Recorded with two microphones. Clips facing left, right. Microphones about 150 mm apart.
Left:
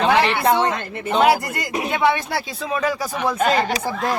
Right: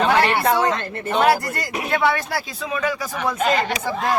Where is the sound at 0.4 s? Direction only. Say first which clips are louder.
Left 1 dB; 25° left (ahead or behind).